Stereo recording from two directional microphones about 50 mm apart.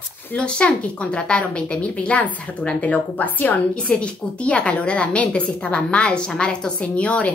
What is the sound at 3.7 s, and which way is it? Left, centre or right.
A woman's voice, centre.